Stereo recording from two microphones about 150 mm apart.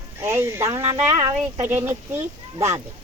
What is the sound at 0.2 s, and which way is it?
Speech, 15° right (ahead or behind).